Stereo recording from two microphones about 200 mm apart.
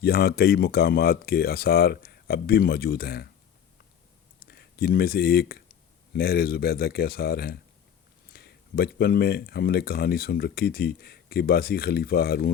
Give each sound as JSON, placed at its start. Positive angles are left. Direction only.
{"t": 0.0, "sound": "speech", "side_deg": 50}
{"t": 4.4, "sound": "speech", "side_deg": 55}